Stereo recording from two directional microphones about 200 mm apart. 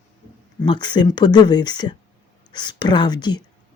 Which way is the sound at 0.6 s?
20° left (ahead or behind).